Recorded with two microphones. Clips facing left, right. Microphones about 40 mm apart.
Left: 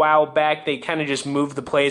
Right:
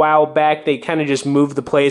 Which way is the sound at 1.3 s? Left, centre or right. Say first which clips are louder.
Right 7 dB; right.